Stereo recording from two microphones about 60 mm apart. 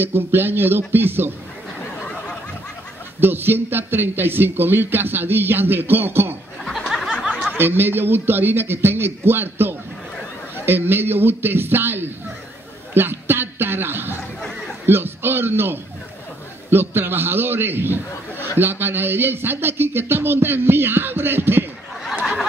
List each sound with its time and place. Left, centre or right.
0.0 s a man's voice: right
3.2 s a man's voice: right
7.0 s a sound: centre
7.5 s a man's voice: right
12.9 s a sound: right
14.9 s a man's voice: right